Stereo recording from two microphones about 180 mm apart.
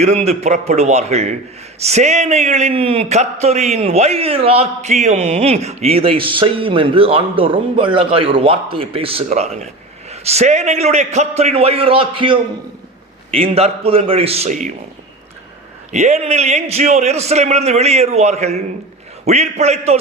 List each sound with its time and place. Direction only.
0.0 s a man's voice: 35° right (ahead or behind)
15.9 s a man's voice: 40° right (ahead or behind)